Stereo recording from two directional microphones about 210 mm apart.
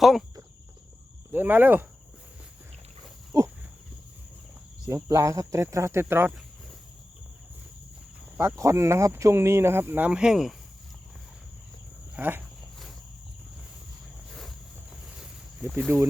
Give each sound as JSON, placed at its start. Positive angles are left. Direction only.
{"t": 0.0, "sound": "speech", "side_deg": 0}
{"t": 1.3, "sound": "speech", "side_deg": -10}
{"t": 3.3, "sound": "a sound", "side_deg": -15}
{"t": 4.9, "sound": "speech", "side_deg": -15}
{"t": 8.4, "sound": "speech", "side_deg": -15}
{"t": 12.1, "sound": "speech", "side_deg": -10}
{"t": 14.3, "sound": "a sound", "side_deg": 0}